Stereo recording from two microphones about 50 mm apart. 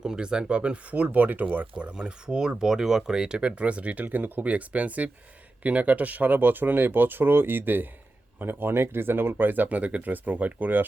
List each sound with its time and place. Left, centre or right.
0.0 s speech: centre; by 1.6 s right
1.7 s speech: centre; by 10.8 s right